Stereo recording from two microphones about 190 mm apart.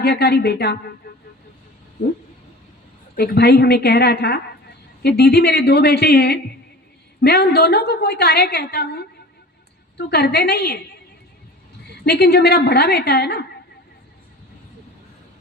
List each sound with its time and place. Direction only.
0.0 s a woman's voice: 60° left (ahead or behind)
3.2 s a woman's voice: 60° left (ahead or behind)
10.1 s a woman's voice: 60° left (ahead or behind)
12.0 s a woman's voice: 60° left (ahead or behind)